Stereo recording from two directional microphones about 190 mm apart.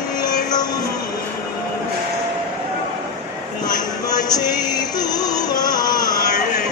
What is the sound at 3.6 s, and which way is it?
Music, 20° left (ahead or behind).